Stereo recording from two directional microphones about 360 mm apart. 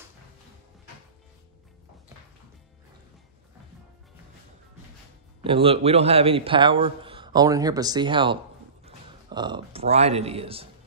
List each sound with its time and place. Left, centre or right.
5.4 s a man's voice: centre